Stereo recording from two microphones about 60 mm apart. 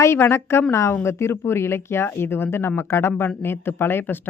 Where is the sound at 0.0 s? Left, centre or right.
Left.